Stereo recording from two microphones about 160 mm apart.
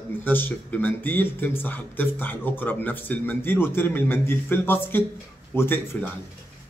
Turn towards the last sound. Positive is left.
turn(degrees=15)  # may be behind; listen again after turning